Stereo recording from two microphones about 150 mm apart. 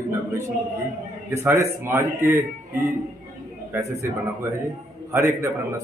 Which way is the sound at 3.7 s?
15° right (ahead or behind).